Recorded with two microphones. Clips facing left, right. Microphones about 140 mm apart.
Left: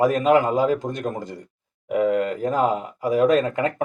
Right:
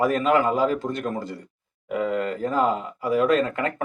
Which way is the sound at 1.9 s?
15° left (ahead or behind).